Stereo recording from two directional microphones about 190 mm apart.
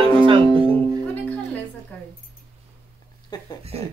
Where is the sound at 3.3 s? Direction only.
20° left (ahead or behind).